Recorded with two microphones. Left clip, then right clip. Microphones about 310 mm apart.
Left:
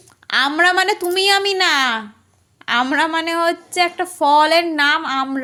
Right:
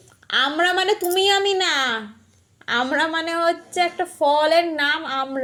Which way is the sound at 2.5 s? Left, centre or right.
Left.